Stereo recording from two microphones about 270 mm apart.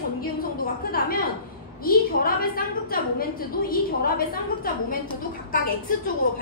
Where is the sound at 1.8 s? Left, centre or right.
Left.